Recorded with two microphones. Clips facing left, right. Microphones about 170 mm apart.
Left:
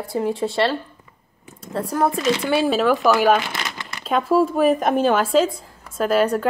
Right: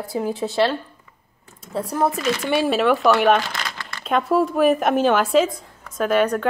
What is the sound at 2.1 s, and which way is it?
Speech, 20° left (ahead or behind).